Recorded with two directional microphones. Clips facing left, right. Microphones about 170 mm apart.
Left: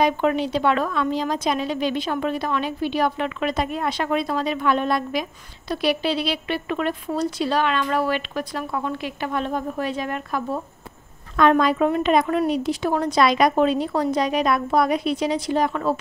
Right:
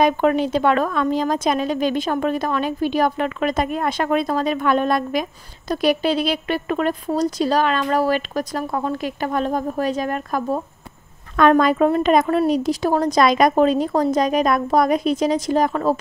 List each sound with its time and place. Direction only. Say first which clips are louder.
0.0 s a woman's voice: right 3 dB; 45° right (ahead or behind)